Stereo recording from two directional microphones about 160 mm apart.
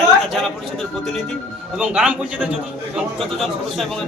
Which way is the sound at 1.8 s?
5° right (ahead or behind).